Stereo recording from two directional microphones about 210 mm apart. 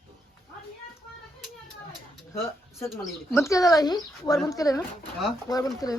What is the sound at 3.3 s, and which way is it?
Speech, 15° left (ahead or behind).